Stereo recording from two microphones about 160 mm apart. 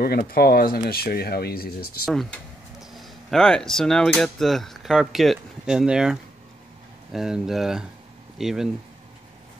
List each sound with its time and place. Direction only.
0.0 s speech: 70° left (ahead or behind)
2.8 s speech: centre (ahead or behind)